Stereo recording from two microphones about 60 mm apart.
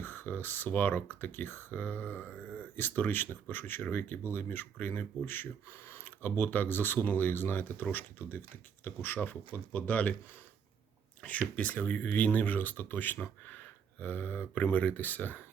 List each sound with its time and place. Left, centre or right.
0.0 s speech: left
11.2 s speech: left